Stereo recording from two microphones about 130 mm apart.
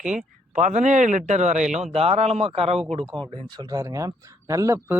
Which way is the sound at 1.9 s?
55° right (ahead or behind).